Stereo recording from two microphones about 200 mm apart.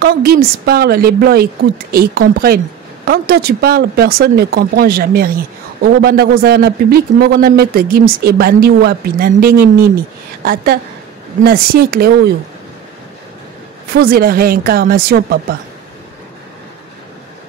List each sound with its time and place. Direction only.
0.0 s speech: 50° right (ahead or behind)
13.9 s speech: 50° right (ahead or behind)